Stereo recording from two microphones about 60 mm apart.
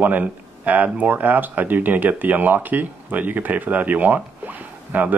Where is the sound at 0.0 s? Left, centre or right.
Right.